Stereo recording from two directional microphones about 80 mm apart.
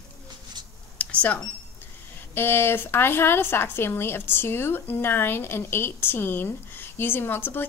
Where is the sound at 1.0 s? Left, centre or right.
Centre.